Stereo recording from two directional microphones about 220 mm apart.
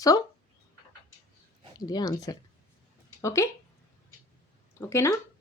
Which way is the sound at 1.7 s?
15° left (ahead or behind).